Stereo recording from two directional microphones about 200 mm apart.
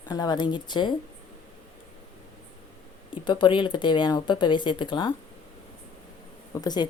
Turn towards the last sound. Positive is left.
turn(degrees=20)  # may be behind; listen again after turning